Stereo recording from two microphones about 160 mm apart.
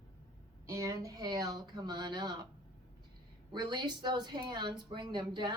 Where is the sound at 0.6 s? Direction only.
20° right (ahead or behind).